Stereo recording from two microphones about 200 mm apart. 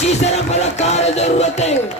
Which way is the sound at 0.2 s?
35° left (ahead or behind).